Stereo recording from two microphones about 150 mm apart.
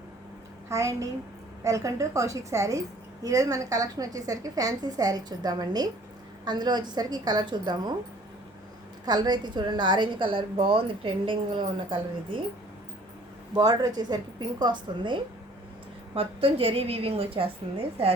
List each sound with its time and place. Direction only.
0.7 s a woman's voice: 20° right (ahead or behind)
9.0 s a woman's voice: 30° right (ahead or behind)
13.5 s a woman's voice: 25° right (ahead or behind)